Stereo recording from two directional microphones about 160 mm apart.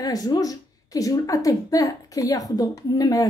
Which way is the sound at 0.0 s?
20° left (ahead or behind).